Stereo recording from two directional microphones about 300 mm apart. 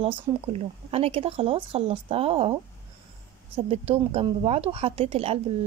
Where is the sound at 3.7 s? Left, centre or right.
Centre.